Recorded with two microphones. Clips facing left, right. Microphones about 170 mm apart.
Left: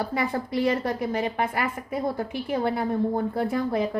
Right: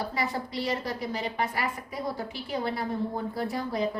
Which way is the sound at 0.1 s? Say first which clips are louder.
Left 5 dB; 55° left (ahead or behind).